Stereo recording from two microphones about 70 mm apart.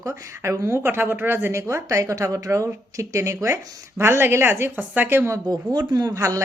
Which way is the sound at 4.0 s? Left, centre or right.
Right.